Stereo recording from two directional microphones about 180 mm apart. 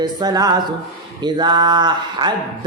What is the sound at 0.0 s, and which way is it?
Speech, 25° right (ahead or behind).